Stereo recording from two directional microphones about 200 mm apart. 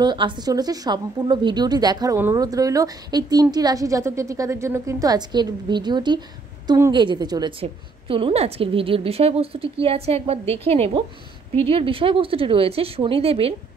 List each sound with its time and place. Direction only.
0.0 s a woman's voice: 20° right (ahead or behind)